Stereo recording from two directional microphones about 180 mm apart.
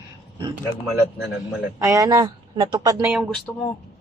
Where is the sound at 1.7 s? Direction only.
20° right (ahead or behind).